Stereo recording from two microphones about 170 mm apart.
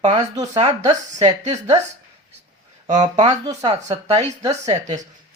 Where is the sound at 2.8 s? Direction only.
45° right (ahead or behind).